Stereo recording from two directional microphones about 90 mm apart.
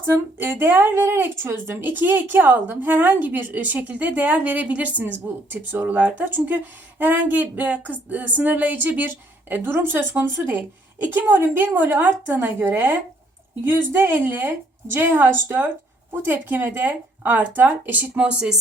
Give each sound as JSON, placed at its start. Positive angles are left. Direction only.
{"t": 0.0, "sound": "speech", "side_deg": -25}